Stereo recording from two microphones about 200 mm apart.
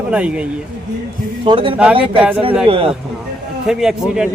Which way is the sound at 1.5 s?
25° right (ahead or behind).